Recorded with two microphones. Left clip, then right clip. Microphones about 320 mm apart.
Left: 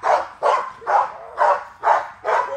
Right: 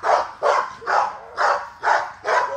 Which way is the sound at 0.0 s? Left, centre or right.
Left.